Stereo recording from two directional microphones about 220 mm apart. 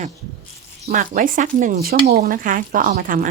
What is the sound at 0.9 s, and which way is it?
Speech, 35° right (ahead or behind).